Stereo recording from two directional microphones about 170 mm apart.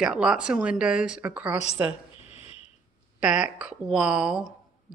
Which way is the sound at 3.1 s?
5° right (ahead or behind).